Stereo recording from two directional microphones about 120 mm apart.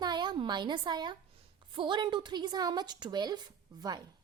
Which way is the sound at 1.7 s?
40° right (ahead or behind).